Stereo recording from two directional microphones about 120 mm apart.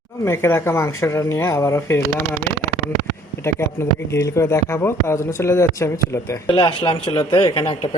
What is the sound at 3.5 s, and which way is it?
Speech, 25° left (ahead or behind).